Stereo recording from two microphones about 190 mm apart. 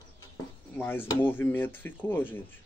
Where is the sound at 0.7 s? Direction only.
10° left (ahead or behind).